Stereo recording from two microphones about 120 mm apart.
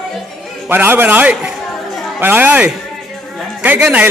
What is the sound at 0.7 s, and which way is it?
A man's voice, 15° right (ahead or behind).